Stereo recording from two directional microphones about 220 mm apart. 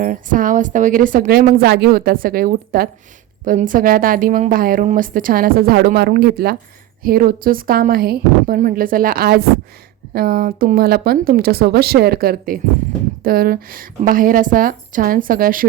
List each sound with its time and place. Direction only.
0.0 s a woman's voice: 35° right (ahead or behind)